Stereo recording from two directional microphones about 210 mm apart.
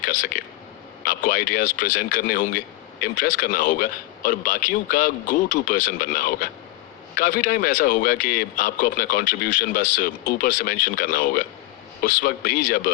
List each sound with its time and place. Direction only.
0.0 s a man's voice: 40° left (ahead or behind)